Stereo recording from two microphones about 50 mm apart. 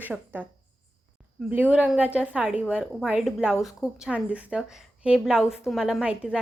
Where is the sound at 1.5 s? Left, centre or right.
Right.